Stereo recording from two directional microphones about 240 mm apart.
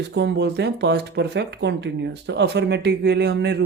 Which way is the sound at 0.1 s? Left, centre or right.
Right.